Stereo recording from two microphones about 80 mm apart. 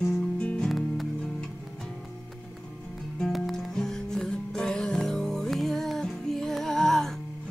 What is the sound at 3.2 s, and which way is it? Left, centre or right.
Music, centre.